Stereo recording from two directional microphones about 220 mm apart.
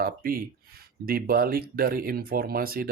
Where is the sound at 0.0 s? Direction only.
40° right (ahead or behind).